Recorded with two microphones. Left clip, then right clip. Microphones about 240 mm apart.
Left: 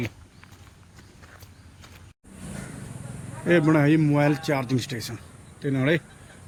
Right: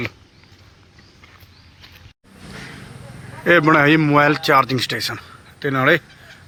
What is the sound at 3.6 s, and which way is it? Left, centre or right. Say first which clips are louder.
Speech: right 8 dB; right.